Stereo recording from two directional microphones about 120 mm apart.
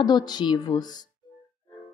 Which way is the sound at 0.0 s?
35° left (ahead or behind).